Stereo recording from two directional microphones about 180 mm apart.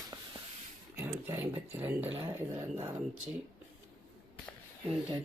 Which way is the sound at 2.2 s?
10° right (ahead or behind).